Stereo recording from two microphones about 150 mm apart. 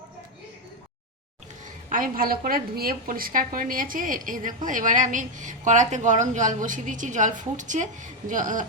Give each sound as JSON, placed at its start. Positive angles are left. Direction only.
{"t": 1.9, "sound": "a woman's voice", "side_deg": -70}